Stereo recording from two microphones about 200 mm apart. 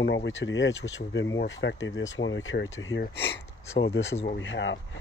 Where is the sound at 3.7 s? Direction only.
65° left (ahead or behind).